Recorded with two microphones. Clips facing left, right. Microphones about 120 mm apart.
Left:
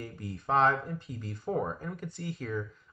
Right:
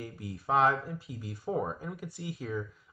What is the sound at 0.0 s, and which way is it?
Speech, 5° right (ahead or behind).